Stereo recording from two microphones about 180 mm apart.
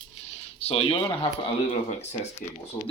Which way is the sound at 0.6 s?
30° left (ahead or behind).